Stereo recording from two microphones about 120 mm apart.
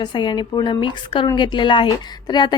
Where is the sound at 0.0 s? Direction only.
40° left (ahead or behind).